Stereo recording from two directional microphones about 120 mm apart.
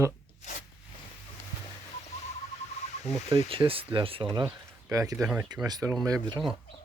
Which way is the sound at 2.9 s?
65° left (ahead or behind).